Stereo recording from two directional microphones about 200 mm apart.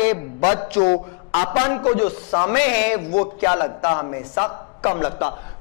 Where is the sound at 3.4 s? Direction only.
30° left (ahead or behind).